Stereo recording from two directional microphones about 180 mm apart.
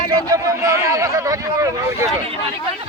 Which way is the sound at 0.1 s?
20° right (ahead or behind).